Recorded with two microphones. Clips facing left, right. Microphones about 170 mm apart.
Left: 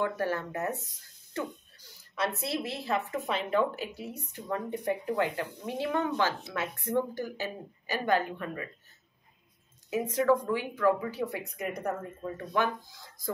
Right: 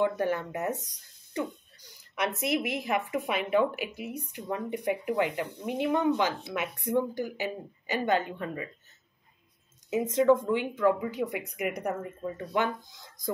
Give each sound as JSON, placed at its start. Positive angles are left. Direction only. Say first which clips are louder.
{"t": 0.0, "sound": "speech", "louder": "right 3 dB", "side_deg": -20}
{"t": 9.8, "sound": "speech", "louder": "right 3 dB", "side_deg": -20}